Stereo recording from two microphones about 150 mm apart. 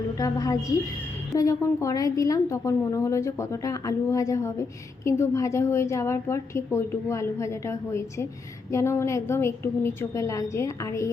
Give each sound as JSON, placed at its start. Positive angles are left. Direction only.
{"t": 0.2, "sound": "a woman's voice", "side_deg": 25}